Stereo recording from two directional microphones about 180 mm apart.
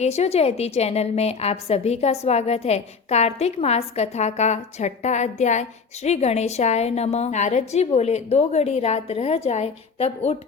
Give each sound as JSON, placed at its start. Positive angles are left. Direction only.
{"t": 0.0, "sound": "a woman's voice", "side_deg": 35}